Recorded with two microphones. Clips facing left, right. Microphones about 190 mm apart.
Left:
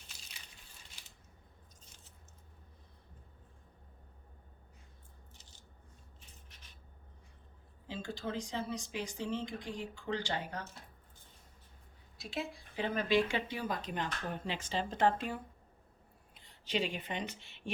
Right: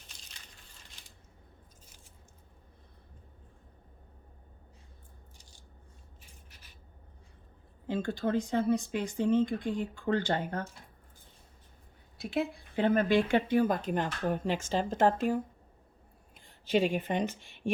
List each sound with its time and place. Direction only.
5.4 s scissors: 10° right (ahead or behind)
7.9 s speech: 55° right (ahead or behind)
12.1 s speech: 60° right (ahead or behind)